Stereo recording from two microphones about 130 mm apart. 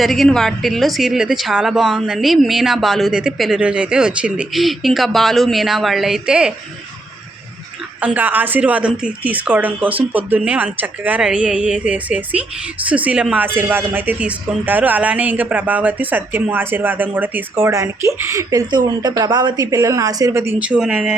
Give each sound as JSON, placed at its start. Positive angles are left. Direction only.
{"t": 0.0, "sound": "speech", "side_deg": 0}
{"t": 8.0, "sound": "a woman's voice", "side_deg": -15}
{"t": 20.7, "sound": "speech", "side_deg": -5}